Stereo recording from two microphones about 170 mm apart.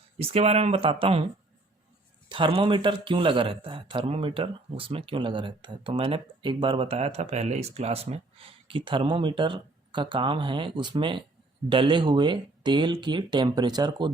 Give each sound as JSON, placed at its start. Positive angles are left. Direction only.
{"t": 0.2, "sound": "speech", "side_deg": -35}
{"t": 2.3, "sound": "speech", "side_deg": -30}